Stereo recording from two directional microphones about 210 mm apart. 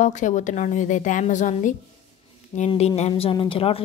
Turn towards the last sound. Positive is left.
turn(degrees=25)  # may be behind; listen again after turning